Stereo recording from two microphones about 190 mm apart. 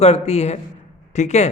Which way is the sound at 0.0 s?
35° left (ahead or behind).